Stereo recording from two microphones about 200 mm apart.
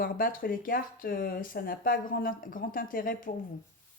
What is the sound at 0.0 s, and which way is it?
Speech, 45° left (ahead or behind).